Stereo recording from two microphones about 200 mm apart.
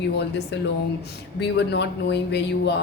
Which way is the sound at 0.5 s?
60° left (ahead or behind).